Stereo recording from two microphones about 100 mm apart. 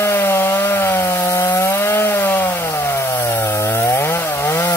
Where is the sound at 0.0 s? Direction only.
25° left (ahead or behind).